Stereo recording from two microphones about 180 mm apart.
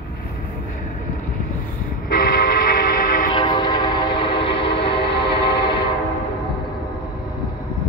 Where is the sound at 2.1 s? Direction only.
50° left (ahead or behind).